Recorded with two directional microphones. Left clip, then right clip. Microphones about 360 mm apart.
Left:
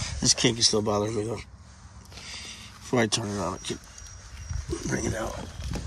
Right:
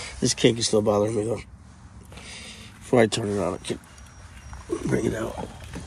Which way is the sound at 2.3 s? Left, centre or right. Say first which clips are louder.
Left 1 dB; centre.